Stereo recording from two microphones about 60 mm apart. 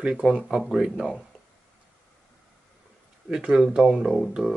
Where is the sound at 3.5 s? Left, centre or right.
Centre.